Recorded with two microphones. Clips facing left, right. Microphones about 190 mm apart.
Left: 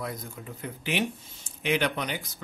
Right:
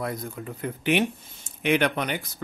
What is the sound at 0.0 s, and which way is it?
Speech, 55° right (ahead or behind).